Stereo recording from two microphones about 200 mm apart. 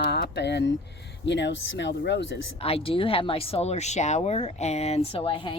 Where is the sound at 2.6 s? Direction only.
30° left (ahead or behind).